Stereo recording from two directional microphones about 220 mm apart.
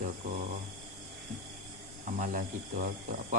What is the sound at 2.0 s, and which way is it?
Speech, 35° right (ahead or behind).